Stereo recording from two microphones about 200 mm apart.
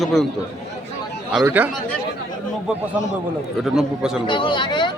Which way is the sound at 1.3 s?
5° right (ahead or behind).